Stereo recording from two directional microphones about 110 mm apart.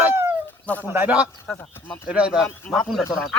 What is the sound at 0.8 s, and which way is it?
Speech, 15° right (ahead or behind).